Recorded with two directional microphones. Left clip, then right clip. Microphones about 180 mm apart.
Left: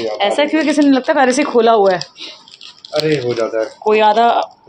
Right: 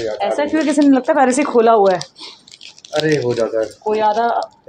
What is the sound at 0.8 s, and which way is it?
Speech, 10° right (ahead or behind).